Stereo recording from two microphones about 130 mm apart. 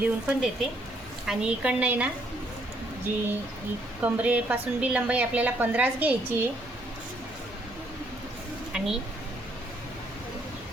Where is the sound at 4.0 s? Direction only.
10° right (ahead or behind).